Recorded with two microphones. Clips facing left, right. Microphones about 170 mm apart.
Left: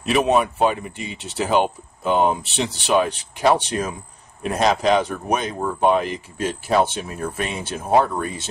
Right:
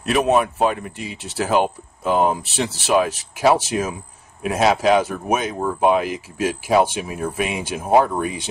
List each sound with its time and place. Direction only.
0.0 s speech: centre (ahead or behind)